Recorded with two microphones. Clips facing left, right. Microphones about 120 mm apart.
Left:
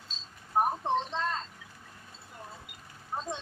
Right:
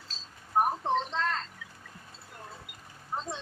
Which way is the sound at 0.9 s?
10° left (ahead or behind).